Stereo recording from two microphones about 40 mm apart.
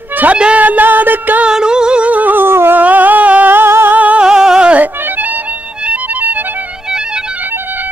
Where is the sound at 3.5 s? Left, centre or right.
Right.